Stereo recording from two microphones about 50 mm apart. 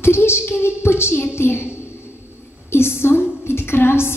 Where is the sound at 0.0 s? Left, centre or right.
Left.